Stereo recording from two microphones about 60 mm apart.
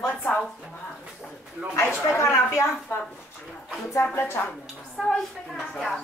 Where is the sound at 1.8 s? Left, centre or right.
Left.